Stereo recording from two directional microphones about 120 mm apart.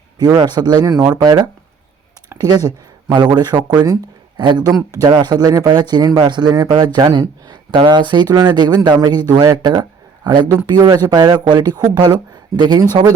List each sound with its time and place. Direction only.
0.2 s speech: 35° right (ahead or behind)